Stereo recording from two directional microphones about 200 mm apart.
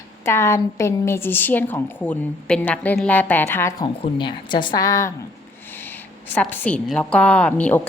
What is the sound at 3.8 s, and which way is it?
A woman's voice, 25° left (ahead or behind).